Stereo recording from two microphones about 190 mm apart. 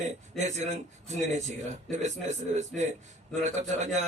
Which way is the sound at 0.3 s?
40° right (ahead or behind).